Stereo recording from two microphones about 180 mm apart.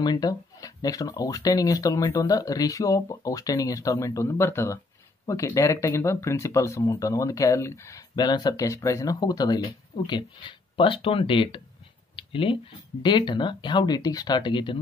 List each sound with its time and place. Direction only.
0.0 s speech: 20° left (ahead or behind)
12.2 s a sound: 30° left (ahead or behind)
13.0 s speech: 25° left (ahead or behind)